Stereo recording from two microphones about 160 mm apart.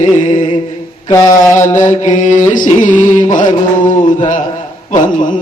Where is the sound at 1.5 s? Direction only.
50° left (ahead or behind).